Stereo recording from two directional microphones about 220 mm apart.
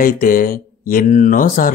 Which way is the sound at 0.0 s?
40° left (ahead or behind).